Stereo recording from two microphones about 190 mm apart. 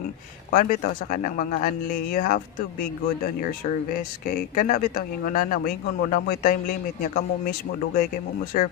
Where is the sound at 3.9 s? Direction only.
45° left (ahead or behind).